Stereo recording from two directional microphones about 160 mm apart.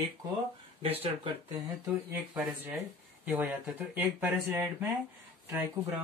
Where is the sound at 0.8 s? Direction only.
40° right (ahead or behind).